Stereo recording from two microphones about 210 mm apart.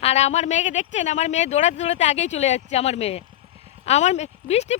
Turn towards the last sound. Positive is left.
turn(degrees=30)  # may be behind; listen again after turning